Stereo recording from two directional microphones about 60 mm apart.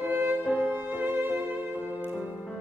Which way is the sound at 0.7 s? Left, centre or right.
Right.